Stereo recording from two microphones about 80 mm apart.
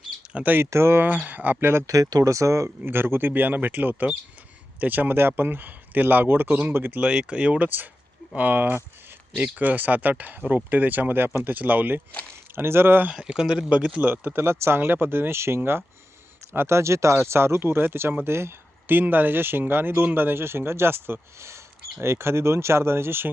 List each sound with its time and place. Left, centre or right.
0.3 s speech: right
1.9 s speech: right
7.0 s speech: centre; by 13.1 s right
13.1 s speech: centre
14.1 s speech: right